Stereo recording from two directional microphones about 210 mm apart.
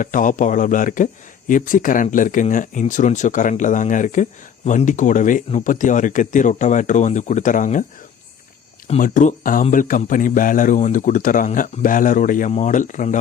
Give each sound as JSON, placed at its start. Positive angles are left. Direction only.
{"t": 0.0, "sound": "speech", "side_deg": 40}
{"t": 8.9, "sound": "speech", "side_deg": 40}